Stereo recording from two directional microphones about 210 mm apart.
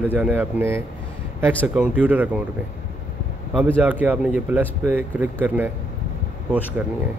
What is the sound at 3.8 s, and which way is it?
Speech, 10° right (ahead or behind).